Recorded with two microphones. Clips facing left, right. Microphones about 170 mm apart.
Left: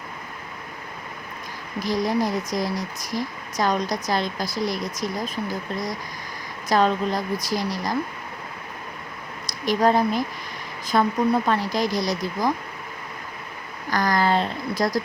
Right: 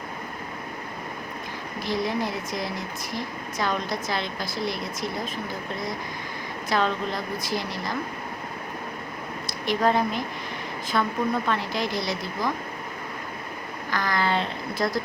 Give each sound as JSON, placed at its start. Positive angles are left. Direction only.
{"t": 1.8, "sound": "speech", "side_deg": 40}
{"t": 6.7, "sound": "speech", "side_deg": 40}
{"t": 9.5, "sound": "speech", "side_deg": 40}
{"t": 13.9, "sound": "speech", "side_deg": 40}